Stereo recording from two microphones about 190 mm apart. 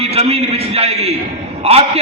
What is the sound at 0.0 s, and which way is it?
A man's voice, 30° right (ahead or behind).